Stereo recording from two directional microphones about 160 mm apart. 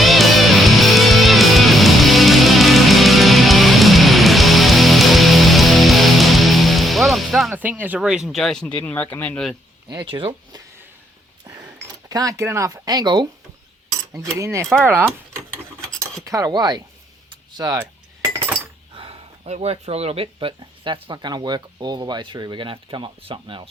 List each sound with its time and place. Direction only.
0.0 s music: centre (ahead or behind)
7.5 s speech: 10° right (ahead or behind); by 9.6 s 5° left (ahead or behind)
9.9 s speech: 30° right (ahead or behind)
12.0 s speech: 20° right (ahead or behind)
14.1 s cutlery: 20° right (ahead or behind)
16.2 s speech: 20° right (ahead or behind)
17.2 s a sound: 25° right (ahead or behind)
18.9 s speech: 35° right (ahead or behind)